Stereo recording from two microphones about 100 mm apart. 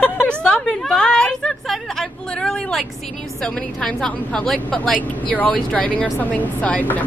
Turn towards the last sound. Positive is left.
turn(degrees=15)  # may be behind; listen again after turning